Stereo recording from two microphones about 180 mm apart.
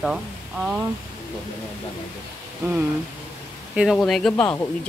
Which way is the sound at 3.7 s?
5° right (ahead or behind).